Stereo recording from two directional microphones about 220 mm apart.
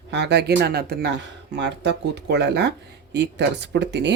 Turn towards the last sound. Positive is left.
turn(degrees=-50)  # may be behind; listen again after turning